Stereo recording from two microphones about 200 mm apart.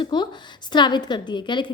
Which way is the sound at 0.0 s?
20° left (ahead or behind).